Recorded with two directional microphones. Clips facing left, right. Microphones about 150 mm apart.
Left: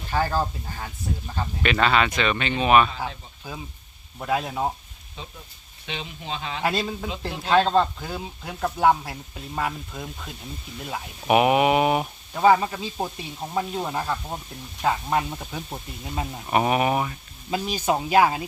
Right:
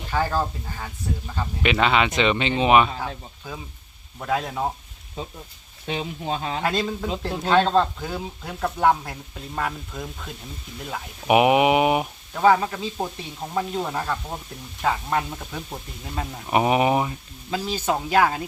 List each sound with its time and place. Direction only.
0.3 s speech: 5° left (ahead or behind)
1.6 s speech: 15° right (ahead or behind)
4.2 s speech: 5° left (ahead or behind)
5.8 s speech: 40° right (ahead or behind)
6.7 s speech: 10° left (ahead or behind)
11.3 s speech: 15° right (ahead or behind)
12.3 s speech: 10° left (ahead or behind)
16.5 s speech: 15° right (ahead or behind)
17.7 s speech: 10° left (ahead or behind)